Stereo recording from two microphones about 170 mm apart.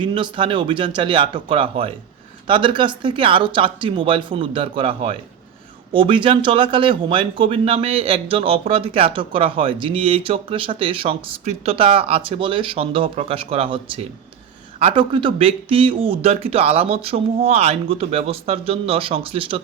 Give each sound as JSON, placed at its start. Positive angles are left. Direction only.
{"t": 0.0, "sound": "a man's voice", "side_deg": -30}